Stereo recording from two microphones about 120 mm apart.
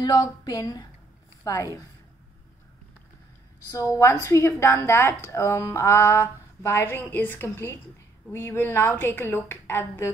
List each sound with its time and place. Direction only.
0.0 s a woman's voice: 30° left (ahead or behind)
4.0 s a woman's voice: 25° left (ahead or behind)